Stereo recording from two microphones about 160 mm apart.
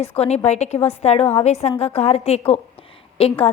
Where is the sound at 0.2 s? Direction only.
40° left (ahead or behind).